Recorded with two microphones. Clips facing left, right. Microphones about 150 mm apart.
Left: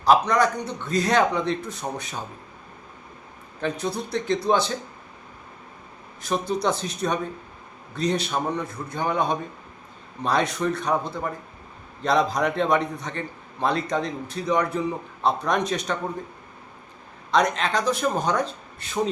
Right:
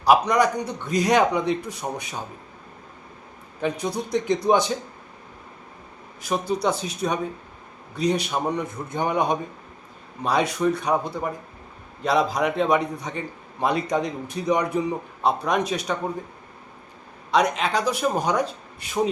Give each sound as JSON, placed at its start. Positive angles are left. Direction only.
{"t": 0.0, "sound": "a man's voice", "side_deg": -10}
{"t": 3.6, "sound": "a man's voice", "side_deg": -15}
{"t": 6.2, "sound": "a man's voice", "side_deg": -10}
{"t": 17.3, "sound": "a man's voice", "side_deg": -10}